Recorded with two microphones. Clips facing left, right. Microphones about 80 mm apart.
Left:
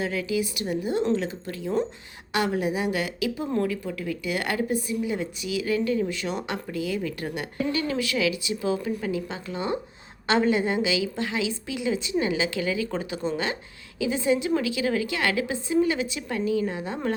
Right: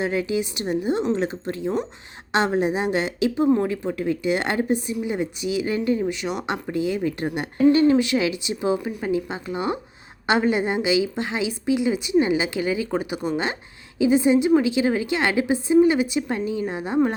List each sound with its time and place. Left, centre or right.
0.0 s a woman's voice: right